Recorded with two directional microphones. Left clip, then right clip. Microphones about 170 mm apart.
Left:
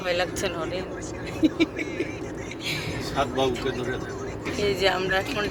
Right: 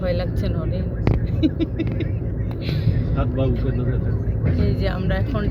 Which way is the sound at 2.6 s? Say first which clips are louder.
Left 1 dB; 10° left (ahead or behind).